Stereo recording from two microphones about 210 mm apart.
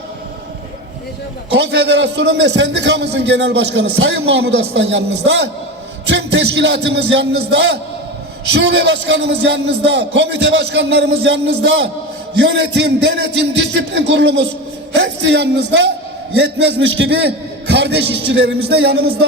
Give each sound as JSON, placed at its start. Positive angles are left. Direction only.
{"t": 1.5, "sound": "a man's voice", "side_deg": -55}
{"t": 6.1, "sound": "music", "side_deg": -55}
{"t": 7.5, "sound": "a man's voice", "side_deg": -60}